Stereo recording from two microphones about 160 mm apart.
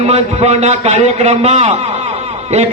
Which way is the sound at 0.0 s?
40° right (ahead or behind).